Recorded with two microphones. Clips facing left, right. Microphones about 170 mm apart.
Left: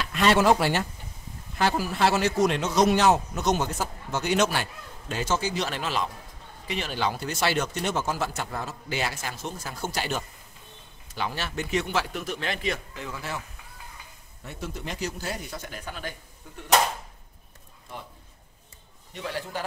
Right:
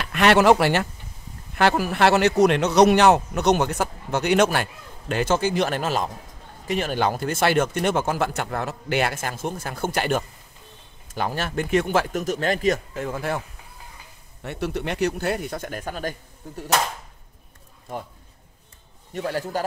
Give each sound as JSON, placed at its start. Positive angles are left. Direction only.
{"t": 0.0, "sound": "a man's voice", "side_deg": -65}
{"t": 14.4, "sound": "a man's voice", "side_deg": -70}
{"t": 19.1, "sound": "speech", "side_deg": -45}